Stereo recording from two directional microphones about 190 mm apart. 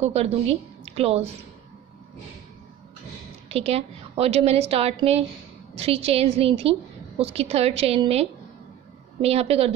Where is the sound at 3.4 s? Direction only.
30° right (ahead or behind).